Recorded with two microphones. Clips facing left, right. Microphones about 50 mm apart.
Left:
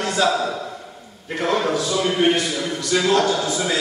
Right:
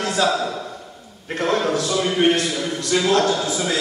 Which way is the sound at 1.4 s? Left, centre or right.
Centre.